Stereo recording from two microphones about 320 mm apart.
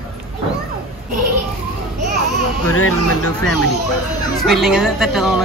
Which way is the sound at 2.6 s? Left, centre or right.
Left.